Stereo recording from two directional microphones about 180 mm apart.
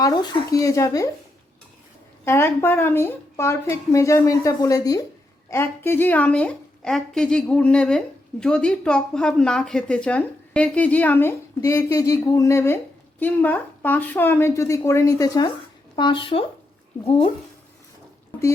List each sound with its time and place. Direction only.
0.0 s speech: 20° left (ahead or behind)
2.2 s a woman's voice: 15° left (ahead or behind); by 17.3 s 30° left (ahead or behind)